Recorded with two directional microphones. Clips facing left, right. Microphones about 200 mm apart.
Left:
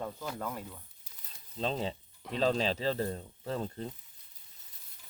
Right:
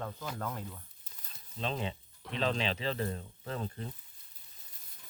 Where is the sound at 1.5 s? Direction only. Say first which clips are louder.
Left 3 dB; 35° left (ahead or behind).